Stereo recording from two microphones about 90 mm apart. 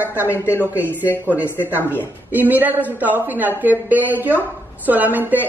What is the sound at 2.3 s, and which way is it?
Speech, 20° right (ahead or behind).